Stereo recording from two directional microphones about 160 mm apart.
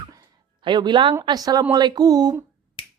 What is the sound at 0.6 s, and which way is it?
Speech, 30° right (ahead or behind).